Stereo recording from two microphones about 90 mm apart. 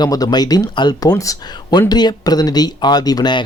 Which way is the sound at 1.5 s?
55° left (ahead or behind).